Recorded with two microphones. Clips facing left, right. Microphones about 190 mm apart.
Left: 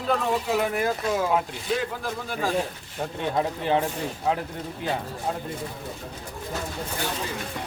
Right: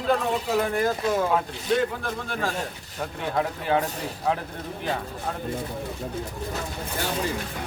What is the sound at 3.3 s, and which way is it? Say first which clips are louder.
Speech: even; 25° left (ahead or behind).